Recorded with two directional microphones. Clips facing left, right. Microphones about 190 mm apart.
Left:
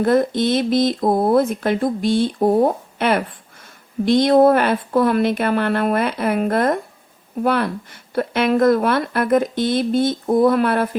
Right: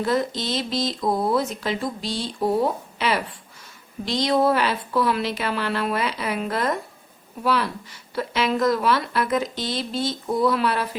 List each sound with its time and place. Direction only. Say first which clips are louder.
0.0 s speech: left 7 dB; 55° left (ahead or behind)